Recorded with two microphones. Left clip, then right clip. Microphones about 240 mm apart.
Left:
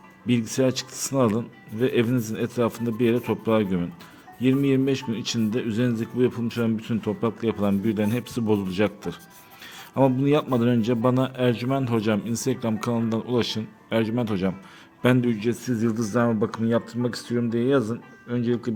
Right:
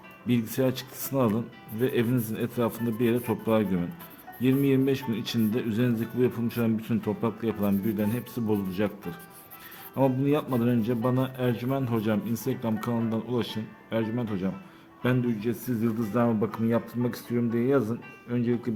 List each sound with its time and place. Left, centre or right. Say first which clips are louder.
0.3 s a man's voice: left 4 dB; centre